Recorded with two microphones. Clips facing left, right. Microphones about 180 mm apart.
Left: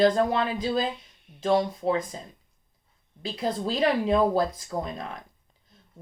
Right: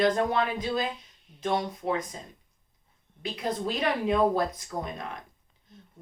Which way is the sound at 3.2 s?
30° left (ahead or behind).